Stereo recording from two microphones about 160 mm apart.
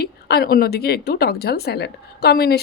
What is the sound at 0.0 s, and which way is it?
A woman's voice, 80° left.